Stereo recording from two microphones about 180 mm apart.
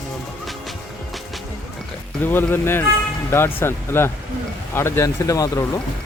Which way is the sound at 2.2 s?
10° left (ahead or behind).